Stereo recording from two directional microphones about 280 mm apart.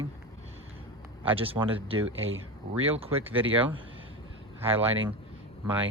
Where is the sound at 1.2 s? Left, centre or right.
Centre.